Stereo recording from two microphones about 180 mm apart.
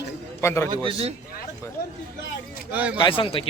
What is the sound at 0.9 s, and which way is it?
Speech, 35° right (ahead or behind).